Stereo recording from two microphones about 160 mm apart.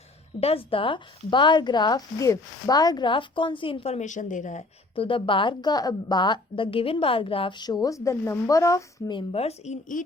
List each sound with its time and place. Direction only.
0.3 s a woman's voice: 40° left (ahead or behind)
4.9 s a woman's voice: 30° left (ahead or behind)